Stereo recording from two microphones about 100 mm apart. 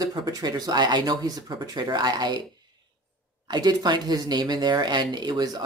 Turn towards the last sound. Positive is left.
turn(degrees=-40)  # may be behind; listen again after turning